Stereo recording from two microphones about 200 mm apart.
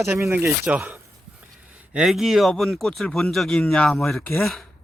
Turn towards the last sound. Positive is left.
turn(degrees=0)  # may be behind; listen again after turning